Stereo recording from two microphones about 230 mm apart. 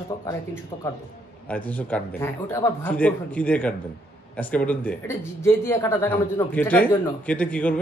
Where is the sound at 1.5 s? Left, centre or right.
Centre.